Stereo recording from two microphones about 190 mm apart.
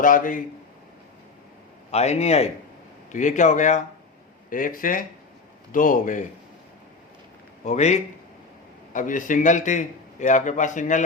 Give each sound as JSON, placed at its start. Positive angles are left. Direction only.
{"t": 0.0, "sound": "speech", "side_deg": 45}
{"t": 1.9, "sound": "a man's voice", "side_deg": 35}
{"t": 7.6, "sound": "a man's voice", "side_deg": 35}